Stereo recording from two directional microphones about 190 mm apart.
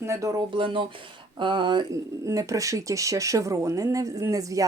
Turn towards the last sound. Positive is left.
turn(degrees=-15)  # may be behind; listen again after turning